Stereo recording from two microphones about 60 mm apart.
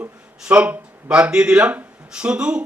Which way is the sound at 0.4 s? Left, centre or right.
Right.